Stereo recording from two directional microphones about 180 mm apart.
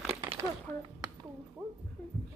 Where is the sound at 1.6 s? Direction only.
5° right (ahead or behind).